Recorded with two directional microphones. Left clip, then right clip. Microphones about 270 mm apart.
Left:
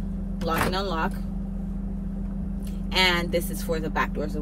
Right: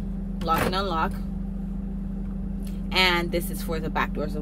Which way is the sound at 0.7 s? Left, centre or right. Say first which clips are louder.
Right 1 dB; right.